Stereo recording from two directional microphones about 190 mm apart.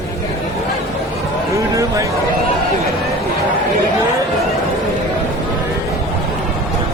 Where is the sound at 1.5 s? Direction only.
15° right (ahead or behind).